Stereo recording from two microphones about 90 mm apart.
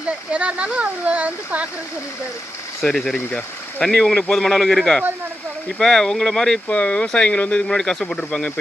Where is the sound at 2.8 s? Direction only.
5° left (ahead or behind).